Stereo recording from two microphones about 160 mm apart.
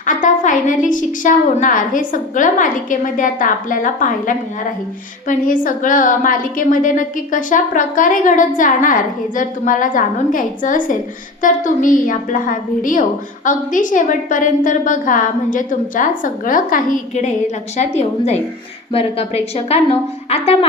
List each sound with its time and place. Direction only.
0.0 s a woman's voice: 55° left (ahead or behind)
5.6 s a woman's voice: 55° left (ahead or behind); by 20.7 s 40° left (ahead or behind)